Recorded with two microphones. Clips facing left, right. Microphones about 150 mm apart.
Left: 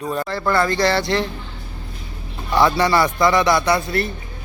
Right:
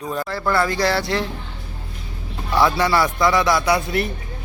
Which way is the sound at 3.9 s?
15° right (ahead or behind).